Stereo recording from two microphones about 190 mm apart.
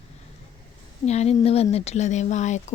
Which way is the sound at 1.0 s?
35° left (ahead or behind).